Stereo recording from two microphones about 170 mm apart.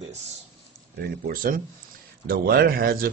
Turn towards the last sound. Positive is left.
turn(degrees=-60)  # may be behind; listen again after turning